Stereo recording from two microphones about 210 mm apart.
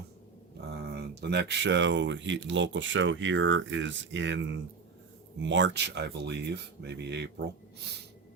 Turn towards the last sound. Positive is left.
turn(degrees=-55)  # may be behind; listen again after turning